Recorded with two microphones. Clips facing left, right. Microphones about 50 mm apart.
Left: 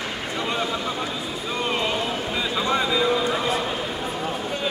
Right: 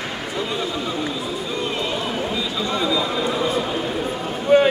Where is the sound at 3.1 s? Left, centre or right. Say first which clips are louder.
Even; centre.